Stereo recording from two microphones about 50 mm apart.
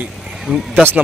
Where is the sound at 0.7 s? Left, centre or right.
Right.